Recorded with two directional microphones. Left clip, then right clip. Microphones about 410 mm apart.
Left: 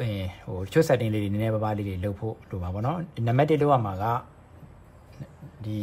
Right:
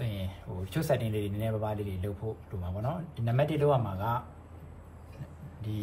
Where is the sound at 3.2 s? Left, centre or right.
Centre.